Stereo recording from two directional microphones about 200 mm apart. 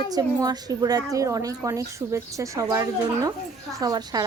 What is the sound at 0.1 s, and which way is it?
A woman's voice, 20° right (ahead or behind).